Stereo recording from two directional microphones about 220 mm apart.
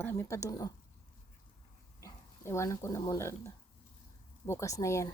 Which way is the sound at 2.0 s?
15° left (ahead or behind).